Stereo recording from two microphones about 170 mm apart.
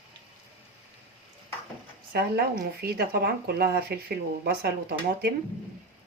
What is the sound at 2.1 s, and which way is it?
Speech, 75° right (ahead or behind).